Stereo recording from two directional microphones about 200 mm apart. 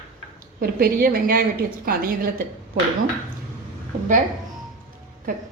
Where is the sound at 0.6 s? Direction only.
50° right (ahead or behind).